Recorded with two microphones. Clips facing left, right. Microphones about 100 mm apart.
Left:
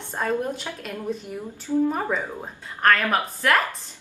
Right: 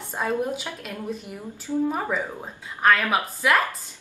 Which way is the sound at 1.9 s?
5° right (ahead or behind).